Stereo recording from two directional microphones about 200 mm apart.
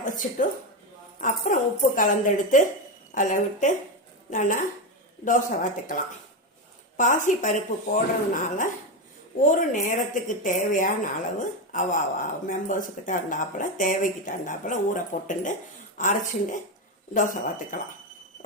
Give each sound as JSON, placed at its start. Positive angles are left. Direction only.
{"t": 0.0, "sound": "speech", "side_deg": 40}